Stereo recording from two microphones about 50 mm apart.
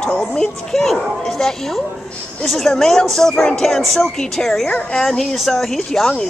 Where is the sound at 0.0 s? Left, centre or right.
Centre.